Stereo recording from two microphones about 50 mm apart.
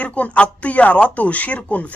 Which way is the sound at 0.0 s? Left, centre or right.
Left.